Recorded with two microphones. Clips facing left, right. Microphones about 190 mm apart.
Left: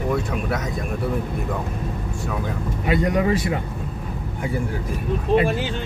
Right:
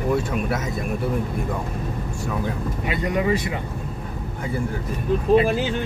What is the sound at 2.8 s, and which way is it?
Speech, 45° left (ahead or behind).